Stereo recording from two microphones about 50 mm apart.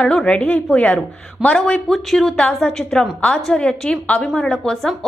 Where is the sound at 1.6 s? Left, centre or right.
Centre.